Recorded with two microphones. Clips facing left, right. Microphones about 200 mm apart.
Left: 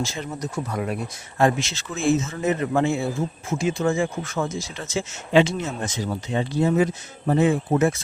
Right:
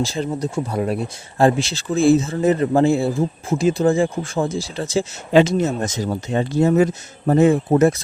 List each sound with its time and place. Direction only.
0.0 s speech: 35° right (ahead or behind)